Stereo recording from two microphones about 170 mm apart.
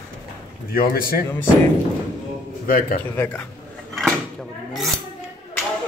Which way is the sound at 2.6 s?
60° left (ahead or behind).